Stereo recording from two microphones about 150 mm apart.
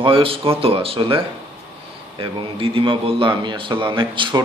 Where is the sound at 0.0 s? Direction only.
35° right (ahead or behind).